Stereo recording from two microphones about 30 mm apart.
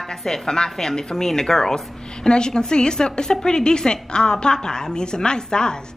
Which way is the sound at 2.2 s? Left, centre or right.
Left.